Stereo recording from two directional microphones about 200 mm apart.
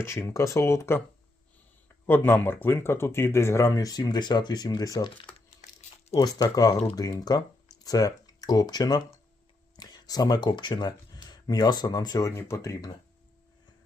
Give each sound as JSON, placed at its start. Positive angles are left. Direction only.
{"t": 0.0, "sound": "speech", "side_deg": 15}
{"t": 2.0, "sound": "speech", "side_deg": 10}
{"t": 6.1, "sound": "speech", "side_deg": 20}